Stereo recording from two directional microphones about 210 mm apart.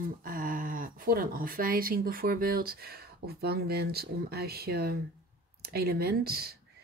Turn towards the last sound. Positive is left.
turn(degrees=-50)  # may be behind; listen again after turning